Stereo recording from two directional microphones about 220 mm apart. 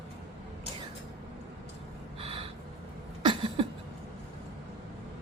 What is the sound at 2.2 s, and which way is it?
Gasp, 25° right (ahead or behind).